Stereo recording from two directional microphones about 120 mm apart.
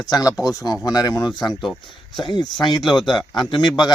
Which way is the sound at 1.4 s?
Centre (ahead or behind).